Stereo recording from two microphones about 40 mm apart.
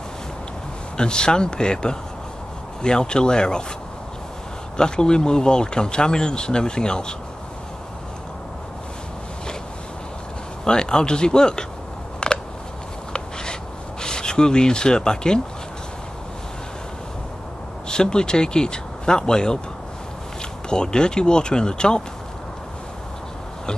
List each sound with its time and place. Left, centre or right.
0.9 s speech: left
4.7 s speech: left
10.6 s speech: centre
12.2 s a sound: left
14.0 s speech: centre
17.8 s speech: left
20.7 s speech: centre